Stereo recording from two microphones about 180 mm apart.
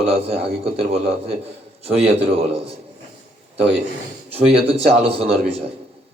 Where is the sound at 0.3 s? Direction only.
35° right (ahead or behind).